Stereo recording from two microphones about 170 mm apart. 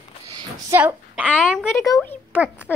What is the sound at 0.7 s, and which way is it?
Speech, 10° right (ahead or behind).